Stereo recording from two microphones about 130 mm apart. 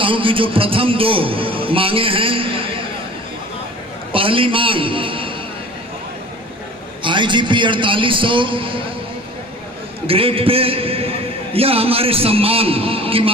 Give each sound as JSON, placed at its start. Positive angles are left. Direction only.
{"t": 0.0, "sound": "a man's voice", "side_deg": -40}
{"t": 4.1, "sound": "a man's voice", "side_deg": -45}
{"t": 7.0, "sound": "a man's voice", "side_deg": -40}
{"t": 10.1, "sound": "a man's voice", "side_deg": -45}